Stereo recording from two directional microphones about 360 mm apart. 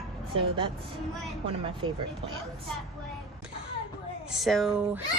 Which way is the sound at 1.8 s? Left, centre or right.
Right.